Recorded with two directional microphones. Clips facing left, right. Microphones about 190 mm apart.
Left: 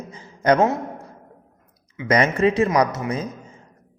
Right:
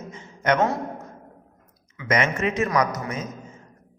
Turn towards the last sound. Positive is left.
turn(degrees=35)  # may be behind; listen again after turning